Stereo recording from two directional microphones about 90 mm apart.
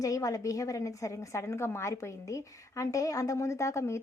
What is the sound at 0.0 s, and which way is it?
A woman's voice, 40° left (ahead or behind).